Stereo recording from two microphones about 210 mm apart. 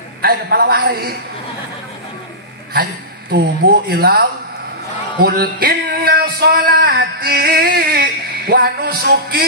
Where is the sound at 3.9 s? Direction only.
45° right (ahead or behind).